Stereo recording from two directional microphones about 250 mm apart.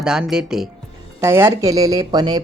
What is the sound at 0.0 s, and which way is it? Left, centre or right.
Speech, centre.